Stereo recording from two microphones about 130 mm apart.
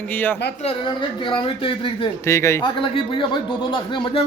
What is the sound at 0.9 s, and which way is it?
A man's voice, 40° left (ahead or behind).